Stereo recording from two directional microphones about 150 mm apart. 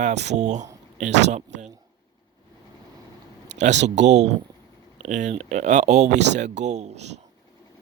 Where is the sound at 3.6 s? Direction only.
50° right (ahead or behind).